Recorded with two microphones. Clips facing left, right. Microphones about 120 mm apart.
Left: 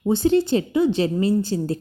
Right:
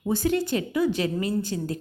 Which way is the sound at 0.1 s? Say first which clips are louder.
Left 6 dB; 25° left (ahead or behind).